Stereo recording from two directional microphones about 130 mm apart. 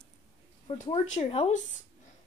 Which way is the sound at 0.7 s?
45° left (ahead or behind).